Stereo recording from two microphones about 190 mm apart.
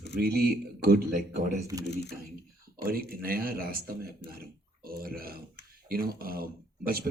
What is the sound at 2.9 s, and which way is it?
Speech, 50° right (ahead or behind).